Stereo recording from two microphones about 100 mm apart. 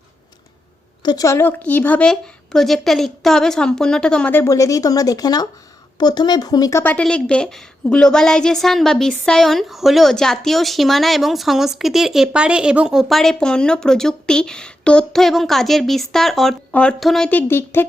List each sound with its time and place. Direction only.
1.0 s a woman's voice: 35° left (ahead or behind); by 4.3 s 10° left (ahead or behind)
4.4 s speech: 35° left (ahead or behind)
6.8 s a woman's voice: 10° left (ahead or behind)
17.2 s speech: 20° left (ahead or behind)